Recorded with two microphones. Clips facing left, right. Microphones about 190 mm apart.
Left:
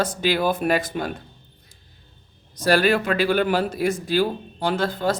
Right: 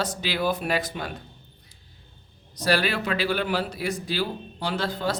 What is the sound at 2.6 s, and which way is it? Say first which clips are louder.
Speech: left 5 dB; 45° left (ahead or behind).